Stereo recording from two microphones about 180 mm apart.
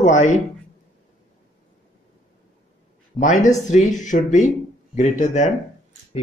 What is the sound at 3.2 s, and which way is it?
Speech, 45° left (ahead or behind).